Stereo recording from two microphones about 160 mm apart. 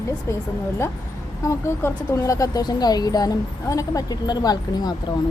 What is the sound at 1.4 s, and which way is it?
Speech, 15° left (ahead or behind).